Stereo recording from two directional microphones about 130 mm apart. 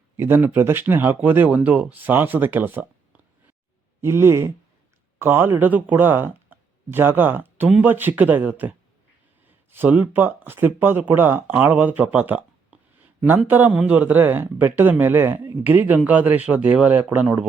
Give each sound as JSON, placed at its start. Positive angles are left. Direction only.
{"t": 0.2, "sound": "speech", "side_deg": -15}
{"t": 4.0, "sound": "speech", "side_deg": -20}
{"t": 13.0, "sound": "a sound", "side_deg": -15}
{"t": 13.5, "sound": "speech", "side_deg": -10}